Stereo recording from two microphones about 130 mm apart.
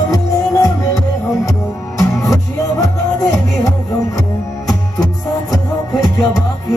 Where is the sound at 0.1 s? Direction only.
25° left (ahead or behind).